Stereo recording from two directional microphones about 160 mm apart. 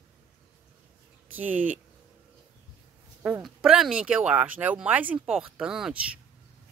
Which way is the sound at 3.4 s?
5° right (ahead or behind).